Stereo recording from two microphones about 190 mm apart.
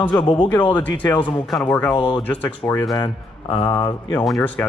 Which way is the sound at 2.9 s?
25° left (ahead or behind).